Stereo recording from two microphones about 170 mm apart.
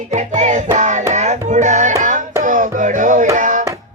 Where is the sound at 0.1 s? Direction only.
45° right (ahead or behind).